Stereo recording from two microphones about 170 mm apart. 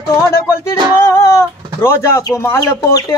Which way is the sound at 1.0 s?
15° left (ahead or behind).